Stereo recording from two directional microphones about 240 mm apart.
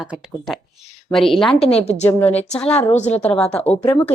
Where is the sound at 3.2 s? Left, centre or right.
Centre.